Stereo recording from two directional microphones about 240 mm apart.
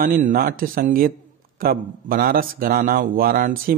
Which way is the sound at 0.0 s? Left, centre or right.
Right.